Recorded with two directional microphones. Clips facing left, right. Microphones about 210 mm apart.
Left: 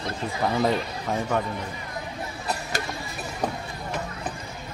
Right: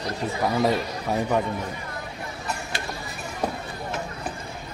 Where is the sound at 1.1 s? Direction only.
15° right (ahead or behind).